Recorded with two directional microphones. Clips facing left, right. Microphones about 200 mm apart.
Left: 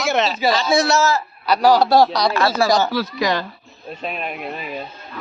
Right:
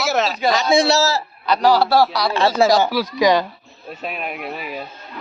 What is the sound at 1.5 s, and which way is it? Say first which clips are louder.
Speech: left 1 dB; 10° left (ahead or behind).